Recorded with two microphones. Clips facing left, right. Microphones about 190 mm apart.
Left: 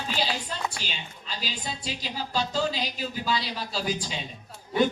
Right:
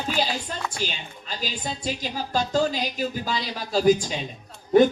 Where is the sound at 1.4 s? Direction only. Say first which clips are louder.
Right 5 dB; 45° right (ahead or behind).